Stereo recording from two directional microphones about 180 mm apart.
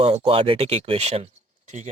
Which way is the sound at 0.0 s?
35° right (ahead or behind).